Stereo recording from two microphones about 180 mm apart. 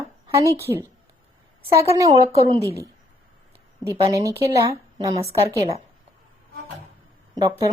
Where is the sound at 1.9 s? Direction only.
20° right (ahead or behind).